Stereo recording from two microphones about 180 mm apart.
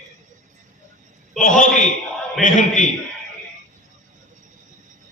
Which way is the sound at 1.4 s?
45° left (ahead or behind).